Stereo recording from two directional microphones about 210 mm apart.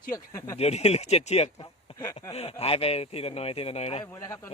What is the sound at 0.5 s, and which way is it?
Speech, 30° left (ahead or behind).